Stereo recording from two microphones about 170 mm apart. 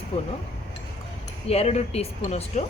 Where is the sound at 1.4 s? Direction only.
35° left (ahead or behind).